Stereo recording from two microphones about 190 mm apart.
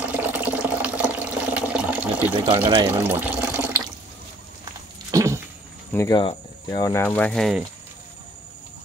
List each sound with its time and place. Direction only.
0.1 s water: 10° right (ahead or behind)
2.6 s speech: 25° right (ahead or behind)
2.9 s speech: 10° right (ahead or behind)
5.1 s a sound: 15° right (ahead or behind)
5.9 s speech: 15° left (ahead or behind)